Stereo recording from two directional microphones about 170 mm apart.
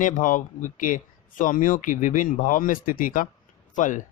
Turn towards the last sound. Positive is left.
turn(degrees=45)  # may be behind; listen again after turning